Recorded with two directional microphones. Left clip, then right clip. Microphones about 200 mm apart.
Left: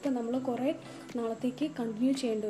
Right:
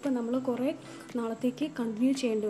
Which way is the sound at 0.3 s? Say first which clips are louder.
Right 1 dB; 30° right (ahead or behind).